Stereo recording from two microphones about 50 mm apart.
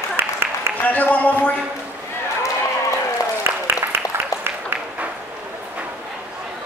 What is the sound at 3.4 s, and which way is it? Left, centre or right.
Applause, right.